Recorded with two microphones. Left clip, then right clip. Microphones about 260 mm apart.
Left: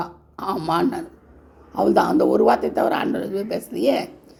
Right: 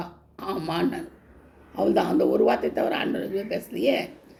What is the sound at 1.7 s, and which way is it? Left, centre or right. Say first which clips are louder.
A woman's voice: left 5 dB; left.